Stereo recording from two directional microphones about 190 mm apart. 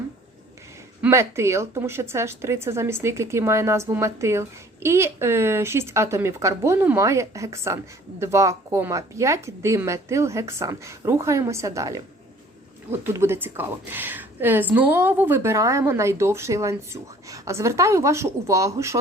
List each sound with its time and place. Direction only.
1.0 s a woman's voice: 15° right (ahead or behind)